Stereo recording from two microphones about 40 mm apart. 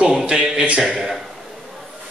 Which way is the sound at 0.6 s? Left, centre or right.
Right.